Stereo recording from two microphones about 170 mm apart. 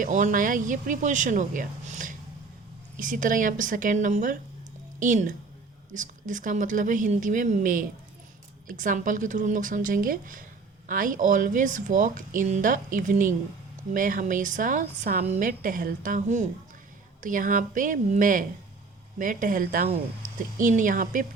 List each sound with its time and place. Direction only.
0.0 s a woman's voice: 50° right (ahead or behind)